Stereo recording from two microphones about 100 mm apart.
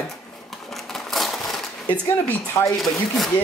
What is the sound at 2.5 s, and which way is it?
Speech, 30° left (ahead or behind).